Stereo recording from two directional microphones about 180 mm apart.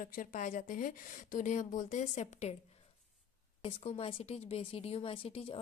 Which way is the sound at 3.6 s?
35° left (ahead or behind).